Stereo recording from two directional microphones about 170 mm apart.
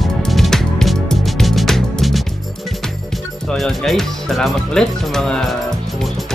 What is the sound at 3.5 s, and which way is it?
Speech, centre (ahead or behind).